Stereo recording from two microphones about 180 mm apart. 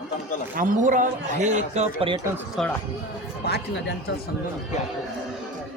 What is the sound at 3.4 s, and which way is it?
Speech, 65° left (ahead or behind).